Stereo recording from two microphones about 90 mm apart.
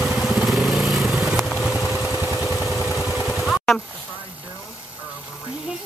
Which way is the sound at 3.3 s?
Centre (ahead or behind).